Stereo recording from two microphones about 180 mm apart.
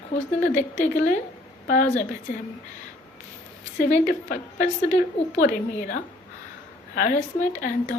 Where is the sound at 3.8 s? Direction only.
45° left (ahead or behind).